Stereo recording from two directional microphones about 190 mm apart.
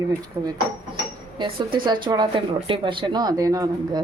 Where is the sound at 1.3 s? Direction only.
25° right (ahead or behind).